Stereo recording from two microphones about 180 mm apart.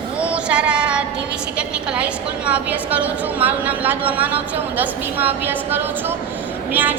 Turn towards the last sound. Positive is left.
turn(degrees=-10)  # may be behind; listen again after turning